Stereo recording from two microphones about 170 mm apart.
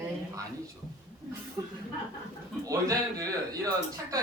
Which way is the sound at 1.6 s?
15° right (ahead or behind).